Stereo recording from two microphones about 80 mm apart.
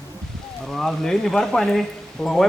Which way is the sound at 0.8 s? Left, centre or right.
Centre.